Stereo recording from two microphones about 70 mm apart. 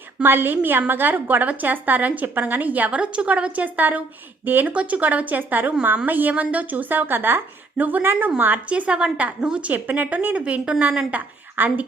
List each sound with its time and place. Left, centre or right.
0.2 s a woman's voice: right